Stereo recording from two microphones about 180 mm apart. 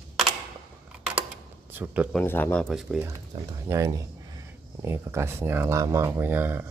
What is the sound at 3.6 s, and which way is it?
Speech, 15° right (ahead or behind).